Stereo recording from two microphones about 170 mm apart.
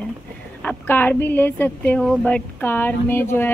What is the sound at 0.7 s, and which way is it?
Speech, 10° left (ahead or behind).